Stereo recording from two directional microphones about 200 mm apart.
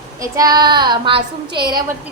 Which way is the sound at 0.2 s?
20° right (ahead or behind).